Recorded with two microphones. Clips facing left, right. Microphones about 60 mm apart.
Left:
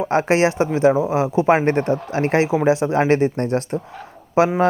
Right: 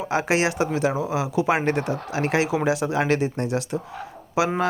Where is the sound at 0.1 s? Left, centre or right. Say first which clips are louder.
Left 4 dB; left.